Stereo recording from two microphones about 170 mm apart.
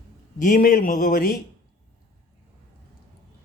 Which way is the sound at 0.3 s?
50° left (ahead or behind).